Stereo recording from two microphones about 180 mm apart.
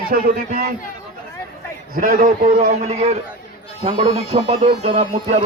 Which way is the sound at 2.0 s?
45° right (ahead or behind).